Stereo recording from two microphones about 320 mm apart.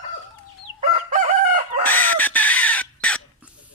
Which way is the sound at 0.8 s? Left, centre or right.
Right.